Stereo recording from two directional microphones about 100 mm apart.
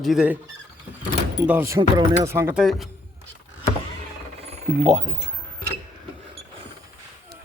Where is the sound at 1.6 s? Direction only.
30° right (ahead or behind).